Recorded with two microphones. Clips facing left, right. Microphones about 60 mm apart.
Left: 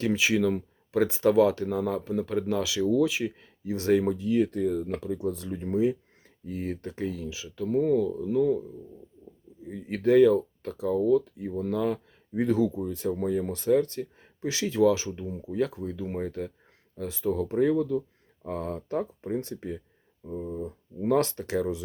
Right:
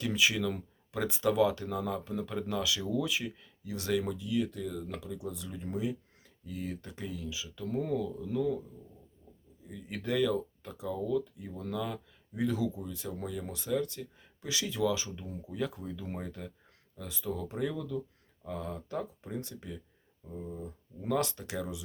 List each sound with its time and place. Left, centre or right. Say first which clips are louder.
0.0 s speech: left 6 dB; left
7.6 s speech: left 9 dB; centre
9.6 s speech: left 11 dB; left
18.4 s speech: left 6 dB; left